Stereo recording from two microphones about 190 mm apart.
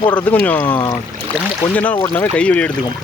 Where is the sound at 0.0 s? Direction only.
25° left (ahead or behind).